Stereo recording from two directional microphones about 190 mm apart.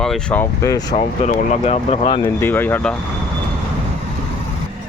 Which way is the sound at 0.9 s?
40° left (ahead or behind).